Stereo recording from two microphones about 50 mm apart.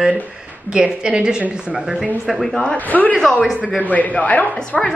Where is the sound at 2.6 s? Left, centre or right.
Left.